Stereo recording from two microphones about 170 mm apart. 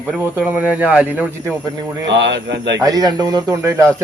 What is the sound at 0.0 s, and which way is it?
Speech, 5° right (ahead or behind).